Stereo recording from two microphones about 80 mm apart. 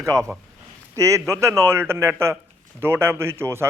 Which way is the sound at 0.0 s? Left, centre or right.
Right.